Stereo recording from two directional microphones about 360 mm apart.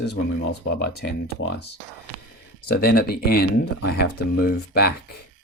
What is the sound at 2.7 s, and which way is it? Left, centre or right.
Speech, left.